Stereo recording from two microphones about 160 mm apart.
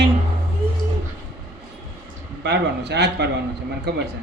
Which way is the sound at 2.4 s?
90° right.